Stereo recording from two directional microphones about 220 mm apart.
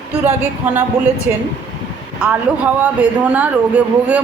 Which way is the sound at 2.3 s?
5° right (ahead or behind).